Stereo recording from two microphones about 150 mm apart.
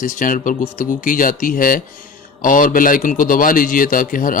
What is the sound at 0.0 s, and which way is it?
A man's voice, 65° left (ahead or behind).